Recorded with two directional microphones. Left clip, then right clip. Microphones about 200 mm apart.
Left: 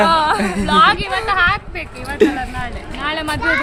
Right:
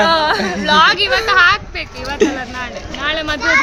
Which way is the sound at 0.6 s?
55° right (ahead or behind).